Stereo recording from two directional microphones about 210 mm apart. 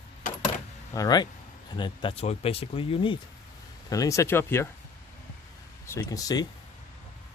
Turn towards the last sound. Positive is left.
turn(degrees=15)  # may be behind; listen again after turning